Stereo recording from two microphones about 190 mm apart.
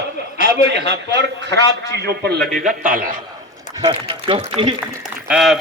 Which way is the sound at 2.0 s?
60° right (ahead or behind).